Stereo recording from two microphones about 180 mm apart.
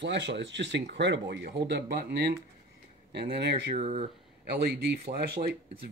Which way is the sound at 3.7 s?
35° right (ahead or behind).